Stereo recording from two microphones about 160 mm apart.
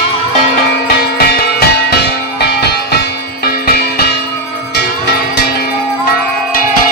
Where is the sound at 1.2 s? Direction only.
80° left.